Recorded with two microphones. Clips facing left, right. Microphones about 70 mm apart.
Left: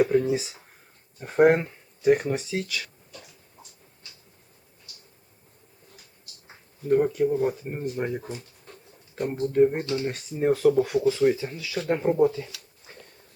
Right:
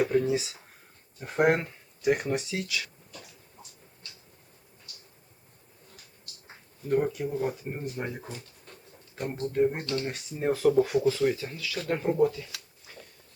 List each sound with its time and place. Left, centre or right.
0.0 s speech: centre
2.0 s speech: centre
6.9 s speech: centre
9.8 s speech: centre
10.2 s speech: centre
11.2 s speech: centre
12.9 s a sound: left